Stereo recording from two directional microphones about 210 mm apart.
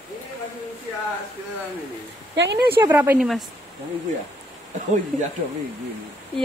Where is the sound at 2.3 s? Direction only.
55° right (ahead or behind).